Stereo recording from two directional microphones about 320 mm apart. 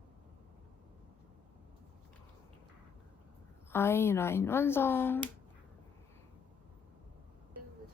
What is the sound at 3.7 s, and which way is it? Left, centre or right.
Speech, centre.